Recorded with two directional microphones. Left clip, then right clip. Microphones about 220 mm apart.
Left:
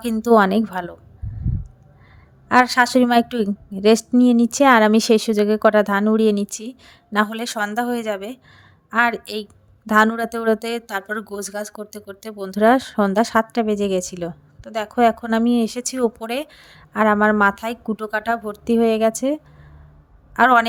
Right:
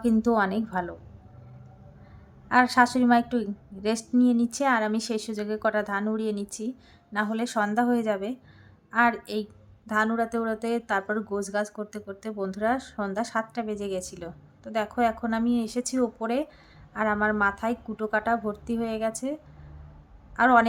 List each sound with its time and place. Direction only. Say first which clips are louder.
0.0 s speech: left 9 dB; 35° left (ahead or behind)
2.5 s a woman's voice: left 6 dB; 35° left (ahead or behind)